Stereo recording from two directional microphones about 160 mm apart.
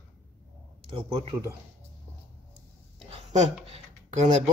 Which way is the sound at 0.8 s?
35° right (ahead or behind).